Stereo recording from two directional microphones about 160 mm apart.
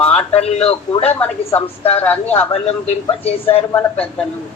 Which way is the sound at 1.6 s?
40° left (ahead or behind).